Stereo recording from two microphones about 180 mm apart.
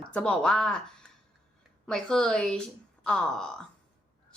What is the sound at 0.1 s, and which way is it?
Speech, 5° left (ahead or behind).